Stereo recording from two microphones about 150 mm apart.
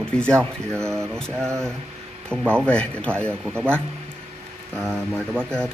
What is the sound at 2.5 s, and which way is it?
Speech, 5° left (ahead or behind).